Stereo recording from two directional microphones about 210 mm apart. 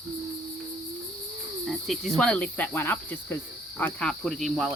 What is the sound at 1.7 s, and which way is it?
Cricket, centre (ahead or behind).